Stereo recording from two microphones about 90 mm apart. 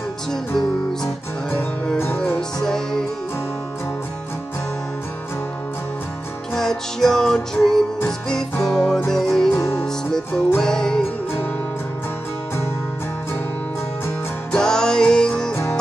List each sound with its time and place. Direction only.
2.6 s music: 5° left (ahead or behind)
6.5 s music: 5° left (ahead or behind)
9.5 s music: 35° left (ahead or behind)
9.8 s music: 5° left (ahead or behind)
14.5 s music: 10° left (ahead or behind)